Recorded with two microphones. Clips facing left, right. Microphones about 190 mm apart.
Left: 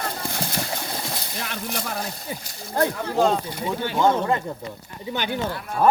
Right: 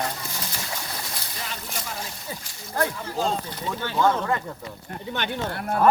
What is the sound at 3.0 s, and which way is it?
Speech, 60° left (ahead or behind).